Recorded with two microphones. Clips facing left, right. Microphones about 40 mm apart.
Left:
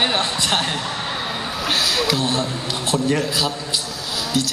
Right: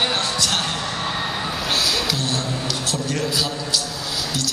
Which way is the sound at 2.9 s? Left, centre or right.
Left.